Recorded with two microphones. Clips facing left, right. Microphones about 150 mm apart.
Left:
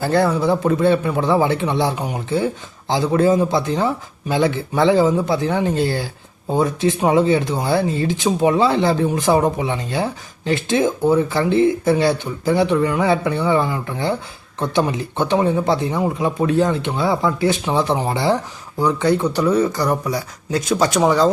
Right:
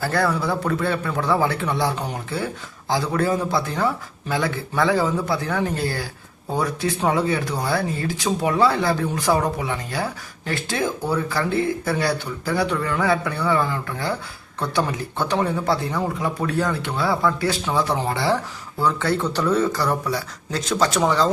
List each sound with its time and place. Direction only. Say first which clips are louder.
0.0 s speech: left 5 dB; 20° left (ahead or behind)